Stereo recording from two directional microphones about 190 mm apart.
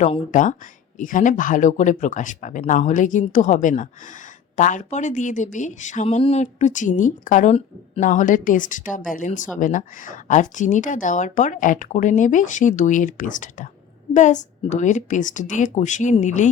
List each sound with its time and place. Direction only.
0.0 s speech: 40° left (ahead or behind)